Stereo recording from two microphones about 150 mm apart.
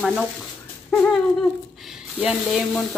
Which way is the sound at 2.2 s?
5° right (ahead or behind).